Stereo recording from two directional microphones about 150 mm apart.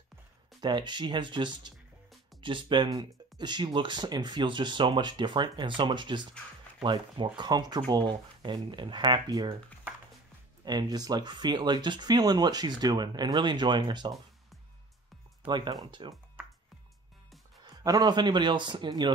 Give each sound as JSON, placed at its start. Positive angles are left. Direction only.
{"t": 0.6, "sound": "speech", "side_deg": -30}
{"t": 10.6, "sound": "speech", "side_deg": -30}
{"t": 15.4, "sound": "speech", "side_deg": -30}
{"t": 17.6, "sound": "speech", "side_deg": -25}